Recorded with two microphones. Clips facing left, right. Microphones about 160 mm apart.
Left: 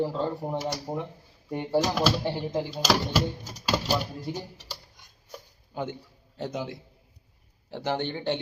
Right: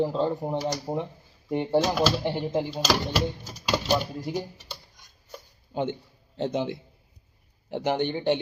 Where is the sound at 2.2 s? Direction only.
20° right (ahead or behind).